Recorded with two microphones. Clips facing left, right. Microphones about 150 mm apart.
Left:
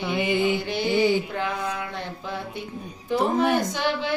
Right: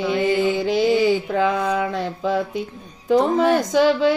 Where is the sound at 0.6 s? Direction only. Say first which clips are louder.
Right 8 dB; 90° right.